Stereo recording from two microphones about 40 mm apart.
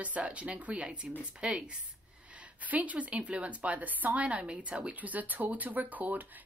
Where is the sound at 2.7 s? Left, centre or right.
Right.